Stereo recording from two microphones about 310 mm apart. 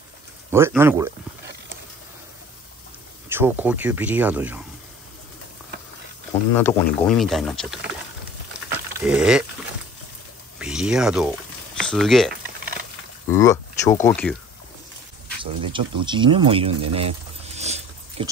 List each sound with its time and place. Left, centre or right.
0.5 s speech: centre
3.3 s speech: centre
6.5 s speech: centre
9.0 s speech: centre
10.6 s speech: centre
13.3 s speech: centre
15.4 s speech: centre
16.9 s a sound: centre